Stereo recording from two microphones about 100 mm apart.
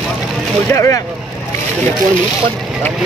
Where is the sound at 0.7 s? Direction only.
30° left (ahead or behind).